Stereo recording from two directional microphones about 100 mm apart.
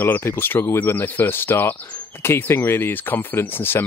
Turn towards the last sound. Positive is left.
turn(degrees=20)  # may be behind; listen again after turning